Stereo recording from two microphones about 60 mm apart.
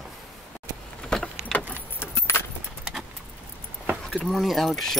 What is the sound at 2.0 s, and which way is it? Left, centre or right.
Keys jangling, left.